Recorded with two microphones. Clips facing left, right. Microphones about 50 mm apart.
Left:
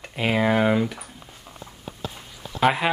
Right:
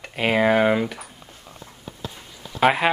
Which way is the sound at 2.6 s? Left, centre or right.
Centre.